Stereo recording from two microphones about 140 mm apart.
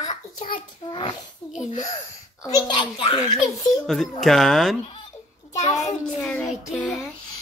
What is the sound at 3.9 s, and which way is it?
Speech, centre (ahead or behind).